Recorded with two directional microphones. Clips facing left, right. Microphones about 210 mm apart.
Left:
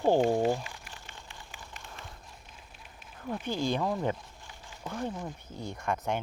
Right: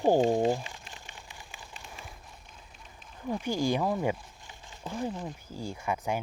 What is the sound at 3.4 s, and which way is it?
Speech, 10° right (ahead or behind).